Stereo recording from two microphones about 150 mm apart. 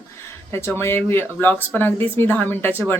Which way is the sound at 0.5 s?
15° left (ahead or behind).